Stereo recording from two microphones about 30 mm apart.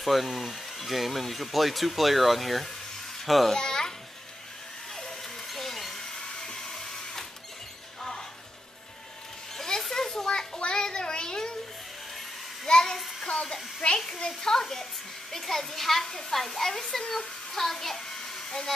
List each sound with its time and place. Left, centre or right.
0.0 s speech: centre
3.5 s babbling: left
5.5 s a sound: centre
5.9 s printer: centre
9.8 s children playing: centre
10.7 s child singing: left
12.6 s a sound: left
13.9 s speech: centre
17.5 s child singing: centre